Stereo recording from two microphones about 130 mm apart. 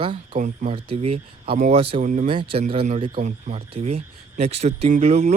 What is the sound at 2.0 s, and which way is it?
Speech, 70° right (ahead or behind).